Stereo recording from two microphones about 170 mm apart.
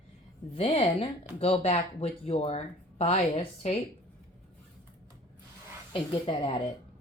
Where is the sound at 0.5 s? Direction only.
35° left (ahead or behind).